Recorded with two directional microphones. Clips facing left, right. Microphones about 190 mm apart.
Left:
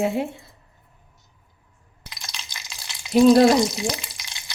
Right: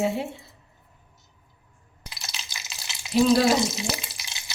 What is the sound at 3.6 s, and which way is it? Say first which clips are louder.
Speech: left 4 dB; 5° right (ahead or behind).